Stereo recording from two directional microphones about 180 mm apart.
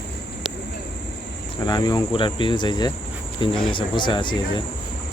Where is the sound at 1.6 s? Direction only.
25° left (ahead or behind).